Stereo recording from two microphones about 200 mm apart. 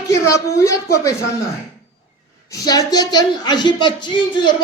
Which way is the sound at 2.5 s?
15° left (ahead or behind).